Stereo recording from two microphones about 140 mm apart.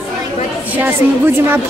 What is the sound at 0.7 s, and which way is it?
Speech, 15° right (ahead or behind).